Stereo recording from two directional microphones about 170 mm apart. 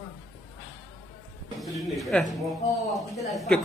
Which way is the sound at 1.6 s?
Centre (ahead or behind).